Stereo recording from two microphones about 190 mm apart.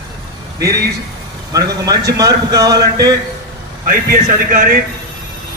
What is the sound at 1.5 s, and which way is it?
A man's voice, 20° right (ahead or behind).